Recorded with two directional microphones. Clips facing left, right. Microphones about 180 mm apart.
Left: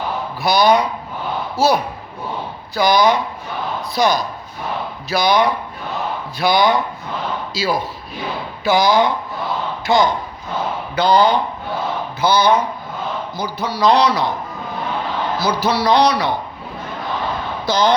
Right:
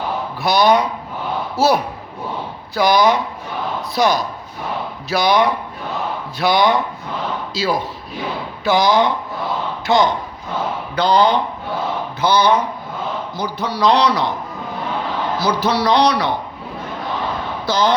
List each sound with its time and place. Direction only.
0.4 s speech: centre (ahead or behind)
15.4 s speech: 5° left (ahead or behind)
17.7 s speech: 15° left (ahead or behind)